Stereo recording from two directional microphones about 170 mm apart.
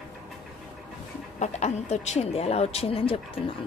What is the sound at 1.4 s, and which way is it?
A woman's voice, 40° left (ahead or behind).